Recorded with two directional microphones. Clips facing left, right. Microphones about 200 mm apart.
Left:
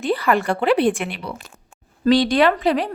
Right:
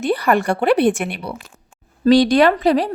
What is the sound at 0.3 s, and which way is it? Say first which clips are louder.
Speech: right 2 dB; 45° right (ahead or behind).